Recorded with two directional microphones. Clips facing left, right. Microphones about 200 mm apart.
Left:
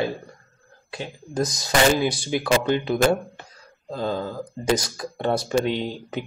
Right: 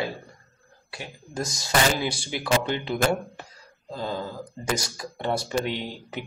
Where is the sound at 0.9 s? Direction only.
20° left (ahead or behind).